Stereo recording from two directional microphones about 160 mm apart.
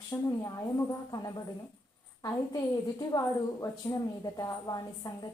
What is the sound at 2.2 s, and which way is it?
A woman's voice, 20° left (ahead or behind).